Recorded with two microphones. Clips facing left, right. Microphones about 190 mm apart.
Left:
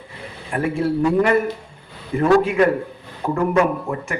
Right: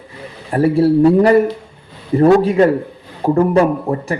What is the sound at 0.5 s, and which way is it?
Speech, 35° right (ahead or behind).